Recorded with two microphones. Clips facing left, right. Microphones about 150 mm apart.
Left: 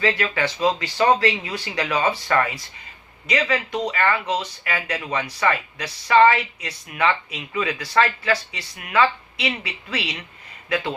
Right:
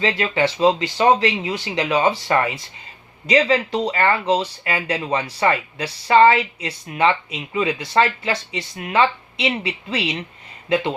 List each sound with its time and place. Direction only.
0.0 s speech: 25° right (ahead or behind)